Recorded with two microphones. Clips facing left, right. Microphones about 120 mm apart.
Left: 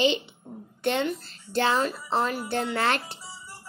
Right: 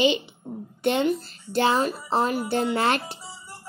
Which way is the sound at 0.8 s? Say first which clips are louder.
Right 4 dB; 15° right (ahead or behind).